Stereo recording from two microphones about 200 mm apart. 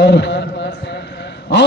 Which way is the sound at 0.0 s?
60° left (ahead or behind).